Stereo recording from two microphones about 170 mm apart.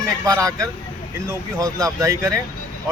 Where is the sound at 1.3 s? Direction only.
20° right (ahead or behind).